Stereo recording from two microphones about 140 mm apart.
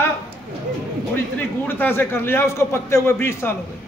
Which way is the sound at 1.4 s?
15° left (ahead or behind).